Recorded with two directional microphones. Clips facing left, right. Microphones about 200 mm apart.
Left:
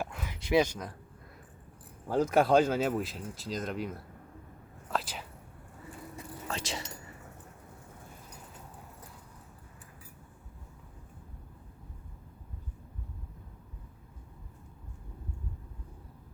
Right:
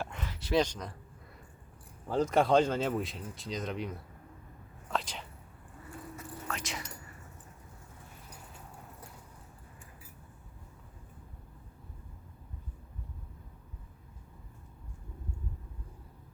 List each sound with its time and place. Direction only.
0.0 s a sound: 10° left (ahead or behind)
2.0 s speech: 10° left (ahead or behind)
6.5 s keys jangling: 30° left (ahead or behind)